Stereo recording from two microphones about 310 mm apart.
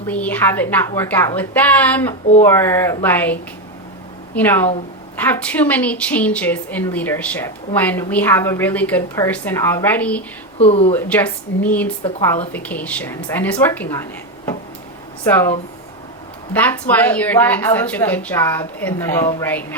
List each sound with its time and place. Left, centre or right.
0.1 s a woman's voice: centre
4.4 s a woman's voice: centre
10.6 s speech: centre
10.9 s a woman's voice: centre